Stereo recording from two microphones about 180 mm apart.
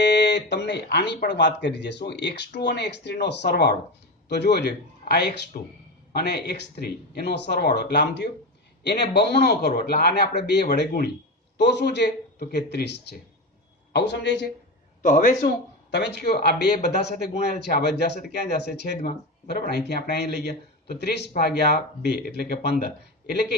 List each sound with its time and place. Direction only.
0.0 s speech: 70° left (ahead or behind)
5.5 s a man's voice: 50° left (ahead or behind)
6.1 s speech: 65° left (ahead or behind)
15.0 s a man's voice: 45° left (ahead or behind)
15.4 s speech: 65° left (ahead or behind)